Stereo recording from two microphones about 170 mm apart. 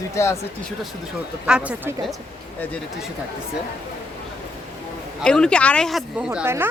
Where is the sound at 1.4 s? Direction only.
5° right (ahead or behind).